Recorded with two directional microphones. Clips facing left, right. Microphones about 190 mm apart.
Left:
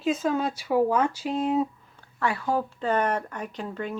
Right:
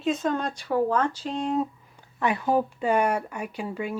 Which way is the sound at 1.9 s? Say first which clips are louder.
Right 5 dB; 15° right (ahead or behind).